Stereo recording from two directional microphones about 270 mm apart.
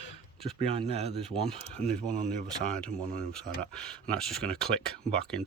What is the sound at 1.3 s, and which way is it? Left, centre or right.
Speech, centre.